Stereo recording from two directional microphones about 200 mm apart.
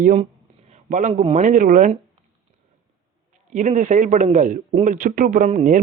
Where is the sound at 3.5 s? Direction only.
40° right (ahead or behind).